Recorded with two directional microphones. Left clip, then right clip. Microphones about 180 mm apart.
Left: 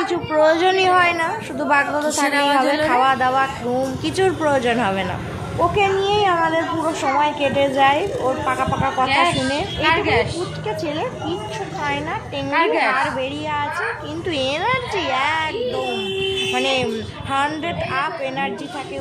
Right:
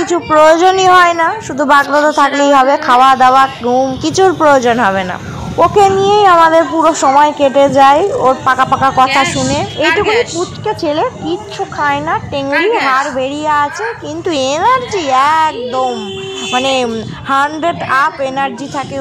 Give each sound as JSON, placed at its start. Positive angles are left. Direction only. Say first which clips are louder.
{"t": 0.0, "sound": "a woman's voice", "louder": "right 9 dB", "side_deg": -30}
{"t": 9.8, "sound": "speech", "louder": "right 6 dB", "side_deg": 0}
{"t": 10.7, "sound": "a woman's voice", "louder": "right 10 dB", "side_deg": -30}
{"t": 12.4, "sound": "speech", "louder": "right 5 dB", "side_deg": 0}
{"t": 13.0, "sound": "a woman's voice", "louder": "right 7 dB", "side_deg": -30}